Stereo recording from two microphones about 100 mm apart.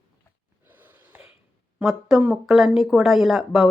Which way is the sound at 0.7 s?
20° right (ahead or behind).